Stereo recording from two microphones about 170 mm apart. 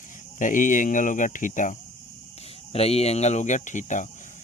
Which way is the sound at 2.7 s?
35° left (ahead or behind).